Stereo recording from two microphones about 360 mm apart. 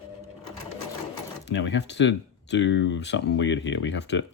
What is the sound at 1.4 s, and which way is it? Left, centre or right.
Speech, left.